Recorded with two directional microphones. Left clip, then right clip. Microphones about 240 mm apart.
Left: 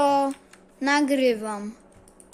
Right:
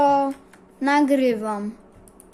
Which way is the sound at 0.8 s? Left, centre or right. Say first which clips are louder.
Right 3 dB; centre.